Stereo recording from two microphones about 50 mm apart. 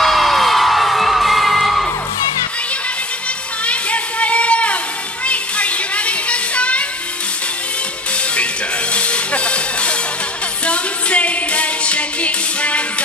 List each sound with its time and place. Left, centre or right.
0.0 s crowd: centre
3.6 s music: left
8.9 s music: left